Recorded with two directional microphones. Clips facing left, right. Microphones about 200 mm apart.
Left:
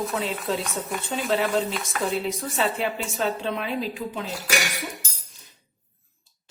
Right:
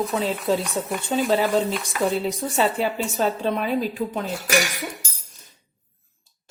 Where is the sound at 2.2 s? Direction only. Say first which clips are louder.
Right 4 dB; 35° right (ahead or behind).